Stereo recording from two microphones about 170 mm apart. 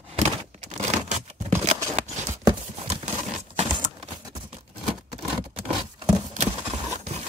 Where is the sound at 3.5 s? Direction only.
35° right (ahead or behind).